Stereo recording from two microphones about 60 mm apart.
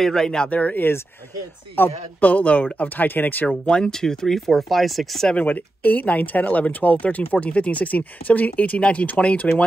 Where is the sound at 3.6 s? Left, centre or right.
Centre.